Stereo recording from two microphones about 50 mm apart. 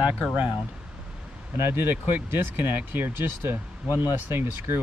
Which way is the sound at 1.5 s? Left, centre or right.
Right.